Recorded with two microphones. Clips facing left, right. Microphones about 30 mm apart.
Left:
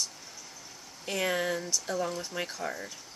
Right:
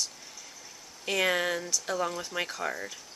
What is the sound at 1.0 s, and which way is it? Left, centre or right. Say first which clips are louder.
Speech: right 3 dB; right.